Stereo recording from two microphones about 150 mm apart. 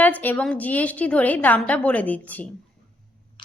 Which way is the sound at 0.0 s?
10° left (ahead or behind).